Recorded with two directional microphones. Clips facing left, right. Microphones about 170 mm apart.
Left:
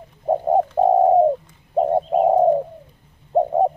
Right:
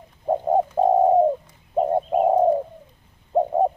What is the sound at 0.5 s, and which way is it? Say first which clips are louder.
Bird: left 2 dB; 10° left (ahead or behind).